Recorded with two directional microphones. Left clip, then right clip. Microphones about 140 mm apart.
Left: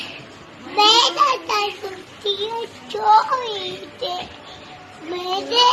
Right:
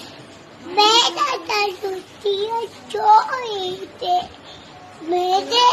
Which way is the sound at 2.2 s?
25° right (ahead or behind).